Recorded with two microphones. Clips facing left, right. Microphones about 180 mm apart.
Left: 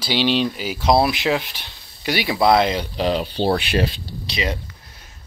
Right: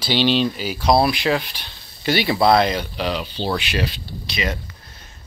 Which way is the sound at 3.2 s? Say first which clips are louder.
Left 4 dB; 55° left (ahead or behind).